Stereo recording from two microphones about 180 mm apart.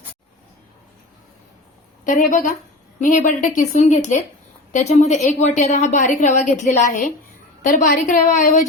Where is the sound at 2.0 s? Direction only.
45° left (ahead or behind).